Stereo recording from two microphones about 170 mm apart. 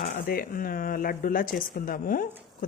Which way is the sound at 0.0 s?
60° left (ahead or behind).